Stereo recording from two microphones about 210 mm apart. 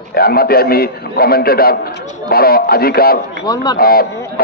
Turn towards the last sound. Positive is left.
turn(degrees=45)  # may be behind; listen again after turning